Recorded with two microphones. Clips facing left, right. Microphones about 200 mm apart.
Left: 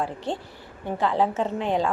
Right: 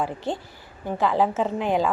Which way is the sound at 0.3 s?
Centre (ahead or behind).